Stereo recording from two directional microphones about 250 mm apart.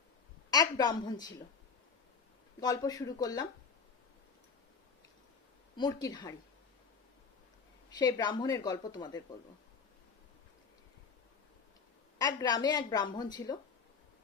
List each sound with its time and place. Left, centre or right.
0.5 s a woman's voice: centre
2.6 s a woman's voice: centre
5.7 s a woman's voice: centre
7.9 s a woman's voice: centre
12.2 s a woman's voice: centre